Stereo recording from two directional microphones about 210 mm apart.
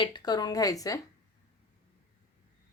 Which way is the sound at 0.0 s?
20° left (ahead or behind).